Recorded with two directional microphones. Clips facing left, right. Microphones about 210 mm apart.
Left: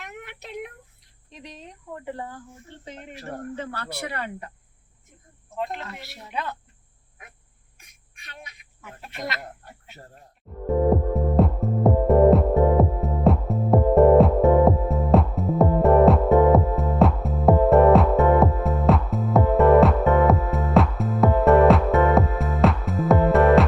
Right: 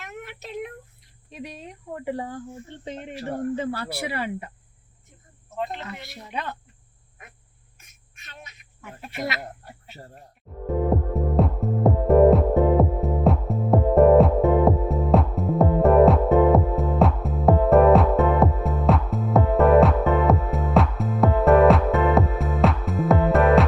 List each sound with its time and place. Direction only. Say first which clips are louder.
0.0 s a sound: right 2 dB; 15° left (ahead or behind)
1.3 s speech: right 5 dB; 10° right (ahead or behind)
3.6 s speech: right 4 dB; 10° right (ahead or behind)
8.8 s speech: right 3 dB; centre (ahead or behind)
10.5 s speech: even; centre (ahead or behind)
10.8 s music: left 2 dB; centre (ahead or behind)